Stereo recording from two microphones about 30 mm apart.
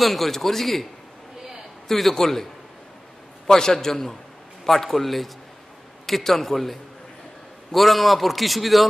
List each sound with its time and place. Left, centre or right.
0.0 s a man's voice: centre
1.9 s a man's voice: centre
3.4 s a man's voice: left; by 8.8 s centre